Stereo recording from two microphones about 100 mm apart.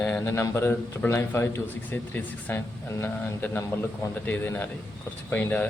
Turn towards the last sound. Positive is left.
turn(degrees=15)  # may be behind; listen again after turning